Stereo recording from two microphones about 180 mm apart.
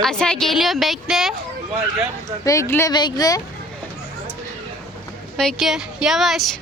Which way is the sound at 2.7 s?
20° left (ahead or behind).